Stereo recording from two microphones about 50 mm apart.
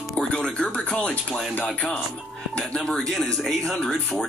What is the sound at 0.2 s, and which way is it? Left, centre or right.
Speech, centre.